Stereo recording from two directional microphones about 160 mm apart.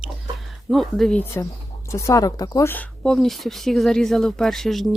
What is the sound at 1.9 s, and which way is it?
A woman's voice, 20° left (ahead or behind).